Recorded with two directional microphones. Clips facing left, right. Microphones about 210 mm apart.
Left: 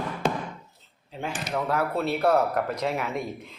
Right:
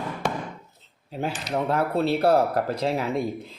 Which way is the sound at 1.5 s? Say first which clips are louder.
Right 2 dB; 25° right (ahead or behind).